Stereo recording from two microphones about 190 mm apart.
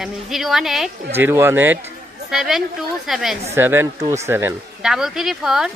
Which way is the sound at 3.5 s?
10° right (ahead or behind).